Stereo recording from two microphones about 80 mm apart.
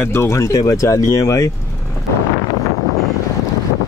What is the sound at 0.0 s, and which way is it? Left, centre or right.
Speech, left.